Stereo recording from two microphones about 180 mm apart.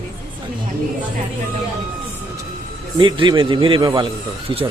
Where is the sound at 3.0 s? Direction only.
25° right (ahead or behind).